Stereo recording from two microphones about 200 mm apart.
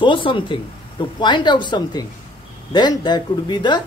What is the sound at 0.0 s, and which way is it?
Speech, 25° left (ahead or behind).